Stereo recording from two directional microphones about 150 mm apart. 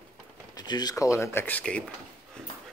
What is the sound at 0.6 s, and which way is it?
Speech, 25° left (ahead or behind).